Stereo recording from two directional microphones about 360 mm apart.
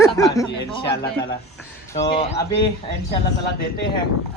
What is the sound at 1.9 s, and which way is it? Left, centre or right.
Speech, centre.